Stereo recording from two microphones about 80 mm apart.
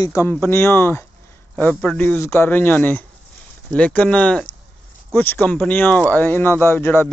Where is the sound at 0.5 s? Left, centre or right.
Left.